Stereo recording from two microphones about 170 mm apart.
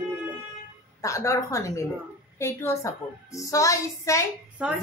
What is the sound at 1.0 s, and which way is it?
A woman's voice, 20° left (ahead or behind).